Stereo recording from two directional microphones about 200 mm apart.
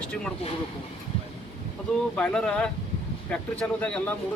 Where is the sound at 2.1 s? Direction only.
5° left (ahead or behind).